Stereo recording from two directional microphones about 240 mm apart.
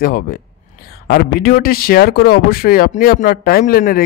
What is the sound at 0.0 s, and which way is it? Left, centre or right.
A man's voice, left.